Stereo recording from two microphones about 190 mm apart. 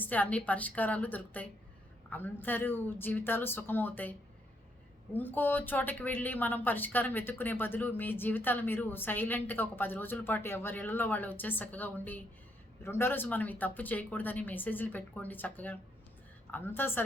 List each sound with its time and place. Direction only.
0.0 s a woman's voice: 10° left (ahead or behind)
5.1 s a woman's voice: 10° left (ahead or behind)